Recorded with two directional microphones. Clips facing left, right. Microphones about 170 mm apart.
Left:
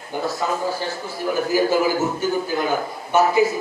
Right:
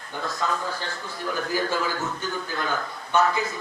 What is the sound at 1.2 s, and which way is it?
A man's voice, 15° left (ahead or behind).